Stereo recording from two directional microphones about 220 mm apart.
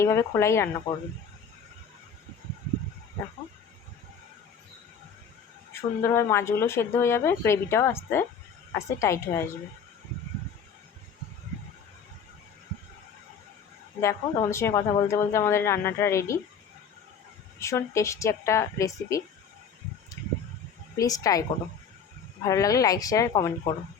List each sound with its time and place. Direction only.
0.0 s speech: 10° left (ahead or behind)
6.0 s speech: 10° left (ahead or behind)
14.0 s speech: 10° left (ahead or behind)
17.6 s speech: 15° left (ahead or behind)
20.2 s a sound: 10° left (ahead or behind)
21.0 s speech: 15° left (ahead or behind)
22.4 s speech: 15° left (ahead or behind)